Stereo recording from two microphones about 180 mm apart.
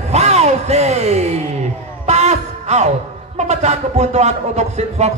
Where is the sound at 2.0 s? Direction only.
40° right (ahead or behind).